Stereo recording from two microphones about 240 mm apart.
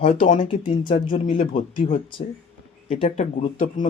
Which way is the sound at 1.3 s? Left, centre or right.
Left.